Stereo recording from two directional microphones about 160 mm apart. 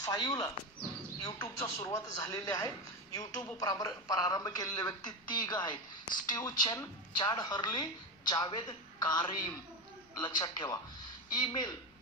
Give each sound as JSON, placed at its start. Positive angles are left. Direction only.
{"t": 0.0, "sound": "a woman's voice", "side_deg": 20}